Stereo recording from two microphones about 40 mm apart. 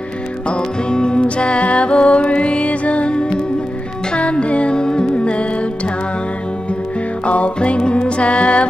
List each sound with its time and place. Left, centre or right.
0.5 s music: left
7.2 s music: left